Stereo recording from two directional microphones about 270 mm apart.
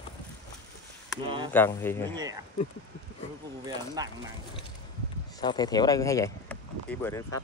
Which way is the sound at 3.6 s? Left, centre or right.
Centre.